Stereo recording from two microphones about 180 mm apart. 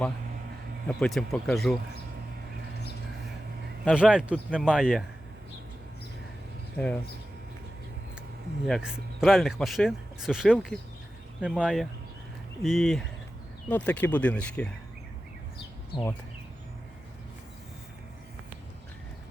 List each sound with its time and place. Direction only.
0.9 s speech: 5° left (ahead or behind)
3.8 s speech: 5° right (ahead or behind)
6.7 s speech: 5° left (ahead or behind)
8.6 s speech: centre (ahead or behind)